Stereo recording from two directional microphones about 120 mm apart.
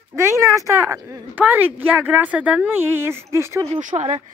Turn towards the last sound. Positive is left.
turn(degrees=-70)  # may be behind; listen again after turning